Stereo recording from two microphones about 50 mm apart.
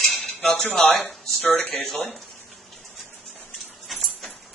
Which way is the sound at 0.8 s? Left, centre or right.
Centre.